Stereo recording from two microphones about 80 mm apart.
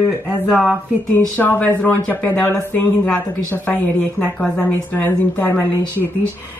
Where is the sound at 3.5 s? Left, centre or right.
Left.